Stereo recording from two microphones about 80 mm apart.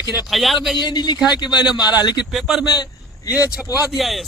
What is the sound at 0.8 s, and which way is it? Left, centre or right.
Speech, left.